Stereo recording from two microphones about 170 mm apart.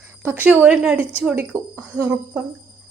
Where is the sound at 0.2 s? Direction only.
10° right (ahead or behind).